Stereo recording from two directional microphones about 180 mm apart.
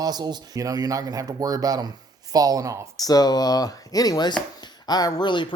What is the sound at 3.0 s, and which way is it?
Speech, 20° left (ahead or behind).